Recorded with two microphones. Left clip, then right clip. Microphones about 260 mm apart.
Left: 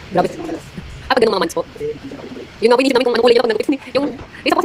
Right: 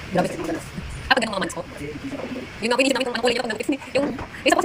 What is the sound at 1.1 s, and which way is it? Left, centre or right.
Speech, centre.